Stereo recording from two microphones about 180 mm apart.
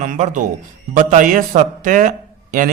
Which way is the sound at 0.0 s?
45° right (ahead or behind).